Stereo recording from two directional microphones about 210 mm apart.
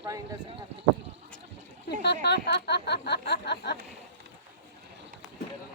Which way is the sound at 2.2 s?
50° left (ahead or behind).